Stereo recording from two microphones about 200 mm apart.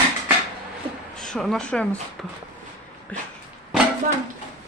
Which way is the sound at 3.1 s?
5° left (ahead or behind).